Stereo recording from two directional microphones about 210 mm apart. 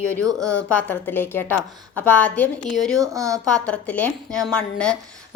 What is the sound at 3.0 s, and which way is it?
Speech, 15° right (ahead or behind).